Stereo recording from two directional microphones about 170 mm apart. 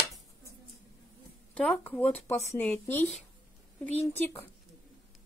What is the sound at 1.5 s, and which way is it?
Speech, 5° left (ahead or behind).